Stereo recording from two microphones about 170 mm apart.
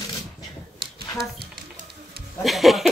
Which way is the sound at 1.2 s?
65° right (ahead or behind).